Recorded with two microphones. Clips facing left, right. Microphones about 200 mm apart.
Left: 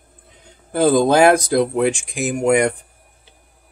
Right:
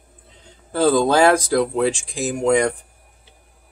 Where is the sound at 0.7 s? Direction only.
15° left (ahead or behind).